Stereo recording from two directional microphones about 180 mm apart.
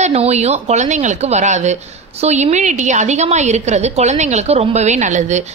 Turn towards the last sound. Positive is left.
turn(degrees=-40)  # may be behind; listen again after turning